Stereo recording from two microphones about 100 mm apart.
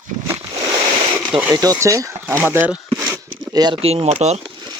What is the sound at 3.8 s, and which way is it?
Speech, 85° right.